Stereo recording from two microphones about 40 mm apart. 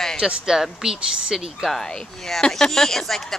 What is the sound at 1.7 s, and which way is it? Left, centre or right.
Speech, centre.